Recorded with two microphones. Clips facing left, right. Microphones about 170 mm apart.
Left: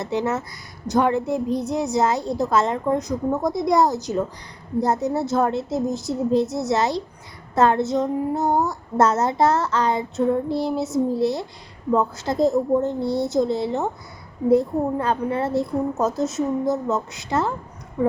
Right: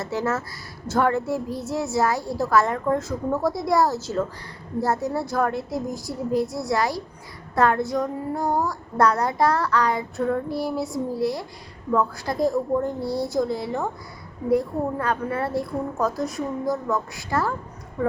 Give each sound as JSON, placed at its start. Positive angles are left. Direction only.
{"t": 0.0, "sound": "child singing", "side_deg": 20}